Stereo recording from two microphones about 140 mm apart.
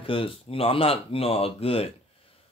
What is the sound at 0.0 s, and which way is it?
Speech, 40° left (ahead or behind).